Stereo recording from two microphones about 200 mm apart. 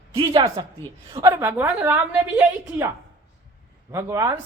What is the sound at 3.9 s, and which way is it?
Speech, 15° right (ahead or behind).